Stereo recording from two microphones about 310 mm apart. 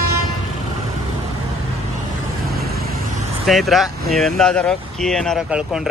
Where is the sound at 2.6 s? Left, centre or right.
Right.